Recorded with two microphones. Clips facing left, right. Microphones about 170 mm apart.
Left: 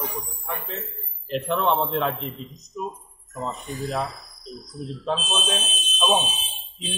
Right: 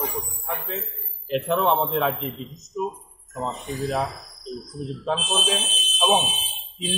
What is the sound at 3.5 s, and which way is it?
Speech, 75° right (ahead or behind).